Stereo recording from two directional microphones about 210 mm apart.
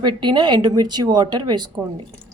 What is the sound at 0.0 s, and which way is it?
Speech, 20° right (ahead or behind).